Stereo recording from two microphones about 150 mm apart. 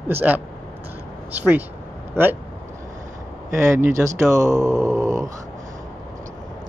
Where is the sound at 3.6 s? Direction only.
20° right (ahead or behind).